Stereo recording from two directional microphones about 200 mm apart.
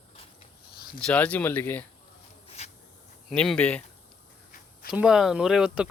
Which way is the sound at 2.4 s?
30° left (ahead or behind).